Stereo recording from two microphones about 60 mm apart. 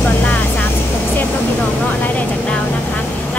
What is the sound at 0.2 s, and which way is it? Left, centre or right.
Vehicle, left.